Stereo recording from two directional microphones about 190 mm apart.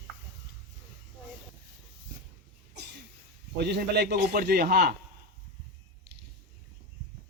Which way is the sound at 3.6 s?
60° right (ahead or behind).